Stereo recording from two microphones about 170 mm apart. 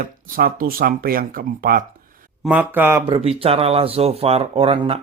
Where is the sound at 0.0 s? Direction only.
60° right (ahead or behind).